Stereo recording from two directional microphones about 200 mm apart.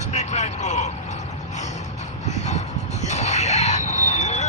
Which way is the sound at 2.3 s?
35° left (ahead or behind).